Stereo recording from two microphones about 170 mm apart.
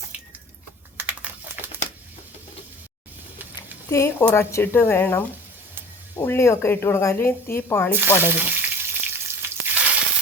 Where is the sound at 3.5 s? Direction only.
20° left (ahead or behind).